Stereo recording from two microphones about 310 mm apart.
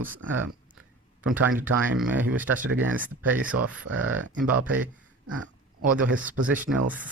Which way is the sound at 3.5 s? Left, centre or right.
Right.